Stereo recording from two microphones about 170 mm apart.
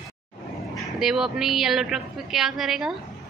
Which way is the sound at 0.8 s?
5° right (ahead or behind).